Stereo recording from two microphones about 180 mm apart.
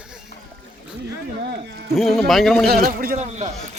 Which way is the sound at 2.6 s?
55° right (ahead or behind).